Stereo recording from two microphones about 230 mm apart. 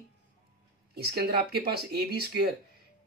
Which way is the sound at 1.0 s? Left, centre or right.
Right.